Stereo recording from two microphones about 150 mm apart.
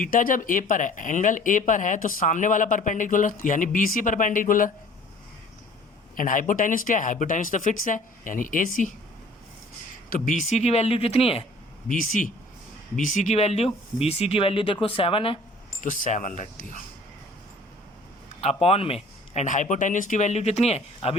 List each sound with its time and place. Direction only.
0.0 s speech: 65° left (ahead or behind)
6.1 s speech: 65° left (ahead or behind)
10.1 s speech: 60° left (ahead or behind); by 11.4 s 40° left (ahead or behind)
11.9 s speech: 60° left (ahead or behind); by 15.4 s 40° left (ahead or behind)
15.8 s speech: 60° left (ahead or behind)
18.3 s speech: 40° left (ahead or behind)
19.3 s speech: 50° left (ahead or behind)